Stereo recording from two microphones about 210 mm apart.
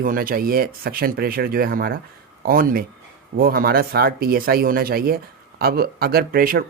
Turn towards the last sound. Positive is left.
turn(degrees=-45)  # may be behind; listen again after turning